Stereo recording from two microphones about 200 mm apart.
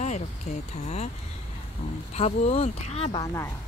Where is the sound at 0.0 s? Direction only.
35° left (ahead or behind).